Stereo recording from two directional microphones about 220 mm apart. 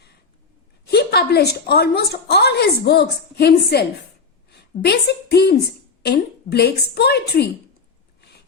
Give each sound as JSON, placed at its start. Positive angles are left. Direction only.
{"t": 0.9, "sound": "a woman's voice", "side_deg": 50}